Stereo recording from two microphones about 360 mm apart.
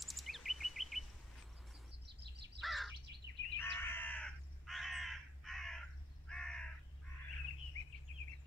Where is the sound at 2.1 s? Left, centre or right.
Right.